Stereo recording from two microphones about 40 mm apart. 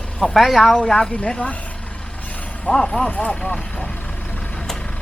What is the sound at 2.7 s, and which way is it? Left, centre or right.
Speech, centre.